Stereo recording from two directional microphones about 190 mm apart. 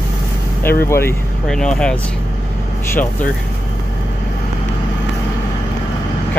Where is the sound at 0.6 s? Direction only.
10° left (ahead or behind).